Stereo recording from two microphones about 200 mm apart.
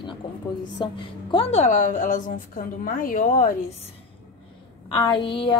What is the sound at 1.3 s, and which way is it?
A woman's voice, 35° left (ahead or behind).